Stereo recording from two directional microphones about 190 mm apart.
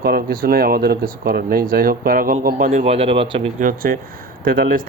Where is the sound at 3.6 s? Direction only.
45° right (ahead or behind).